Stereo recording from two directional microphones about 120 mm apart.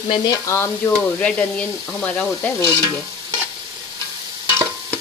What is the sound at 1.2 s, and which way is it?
Sizzle, 10° left (ahead or behind).